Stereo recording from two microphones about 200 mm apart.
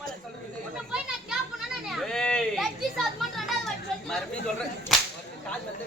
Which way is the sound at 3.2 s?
Centre (ahead or behind).